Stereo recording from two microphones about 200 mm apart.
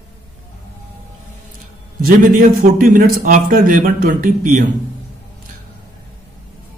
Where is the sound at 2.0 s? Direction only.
45° right (ahead or behind).